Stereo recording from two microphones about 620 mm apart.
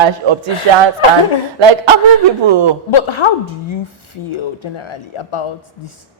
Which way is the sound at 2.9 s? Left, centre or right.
Left.